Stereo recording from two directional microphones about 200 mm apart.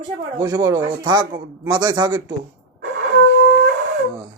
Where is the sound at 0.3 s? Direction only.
20° right (ahead or behind).